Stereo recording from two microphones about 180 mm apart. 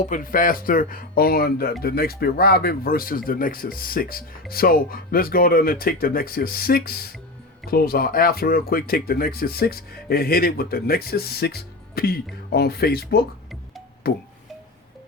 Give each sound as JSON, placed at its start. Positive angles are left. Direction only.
{"t": 0.0, "sound": "speech", "side_deg": 50}